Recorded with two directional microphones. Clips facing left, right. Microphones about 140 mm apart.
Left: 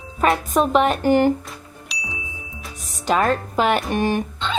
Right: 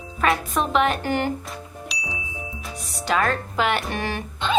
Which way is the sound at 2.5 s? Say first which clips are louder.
Right 2 dB; centre (ahead or behind).